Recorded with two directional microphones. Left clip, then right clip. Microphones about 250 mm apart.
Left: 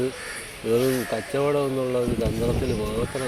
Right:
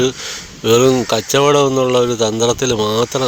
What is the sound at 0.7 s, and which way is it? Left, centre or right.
Speech, right.